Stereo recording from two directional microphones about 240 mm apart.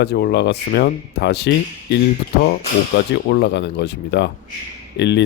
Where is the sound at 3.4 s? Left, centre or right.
Left.